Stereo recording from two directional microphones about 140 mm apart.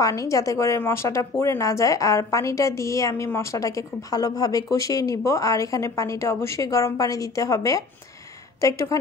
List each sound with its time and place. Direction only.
0.0 s a woman's voice: 25° left (ahead or behind)